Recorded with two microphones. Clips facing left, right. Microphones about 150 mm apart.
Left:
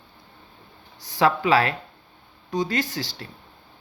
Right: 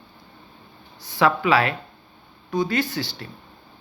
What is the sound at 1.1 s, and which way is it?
Speech, 40° left (ahead or behind).